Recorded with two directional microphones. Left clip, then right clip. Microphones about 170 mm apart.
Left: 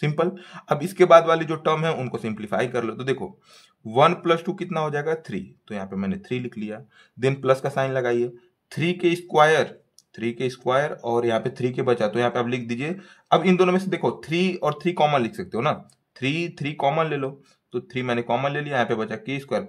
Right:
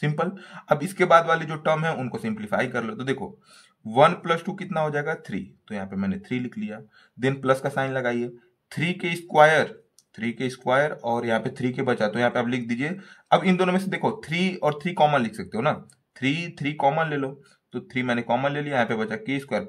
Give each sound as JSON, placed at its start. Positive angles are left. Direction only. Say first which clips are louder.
{"t": 0.0, "sound": "speech", "louder": "left 3 dB", "side_deg": 25}
{"t": 4.2, "sound": "speech", "louder": "left 4 dB", "side_deg": 25}